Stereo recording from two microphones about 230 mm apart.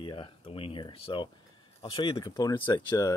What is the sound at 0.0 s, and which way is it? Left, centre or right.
Speech, left.